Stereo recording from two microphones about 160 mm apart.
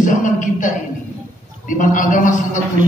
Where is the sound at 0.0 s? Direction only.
55° left (ahead or behind).